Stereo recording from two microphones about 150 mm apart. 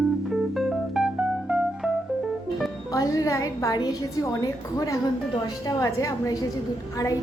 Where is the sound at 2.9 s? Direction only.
25° left (ahead or behind).